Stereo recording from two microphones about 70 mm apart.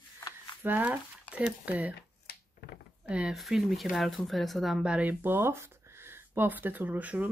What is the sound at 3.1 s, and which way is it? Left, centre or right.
Speech, centre.